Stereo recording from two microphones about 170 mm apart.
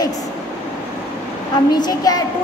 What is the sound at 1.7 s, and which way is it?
Speech, 25° left (ahead or behind).